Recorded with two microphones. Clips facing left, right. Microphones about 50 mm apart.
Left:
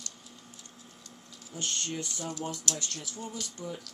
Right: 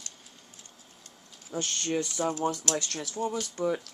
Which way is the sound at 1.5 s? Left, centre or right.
Right.